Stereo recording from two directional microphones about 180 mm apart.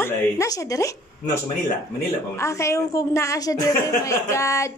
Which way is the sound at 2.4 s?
15° left (ahead or behind).